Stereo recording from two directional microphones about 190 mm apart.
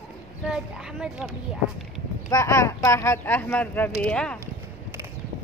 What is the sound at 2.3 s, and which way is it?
Speech, 15° left (ahead or behind).